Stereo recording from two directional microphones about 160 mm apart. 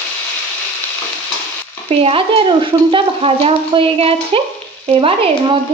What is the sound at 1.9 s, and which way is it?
Speech, 35° right (ahead or behind).